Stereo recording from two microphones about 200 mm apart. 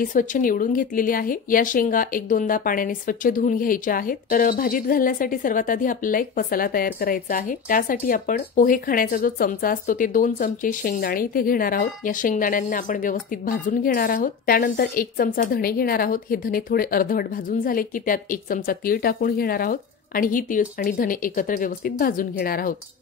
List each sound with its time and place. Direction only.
0.0 s a woman's voice: 40° left (ahead or behind)